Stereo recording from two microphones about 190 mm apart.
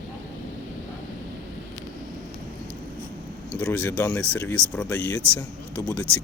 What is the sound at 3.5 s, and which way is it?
Speech, 10° left (ahead or behind).